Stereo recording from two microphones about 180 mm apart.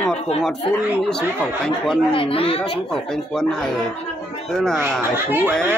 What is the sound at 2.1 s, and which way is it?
Speech, 30° left (ahead or behind).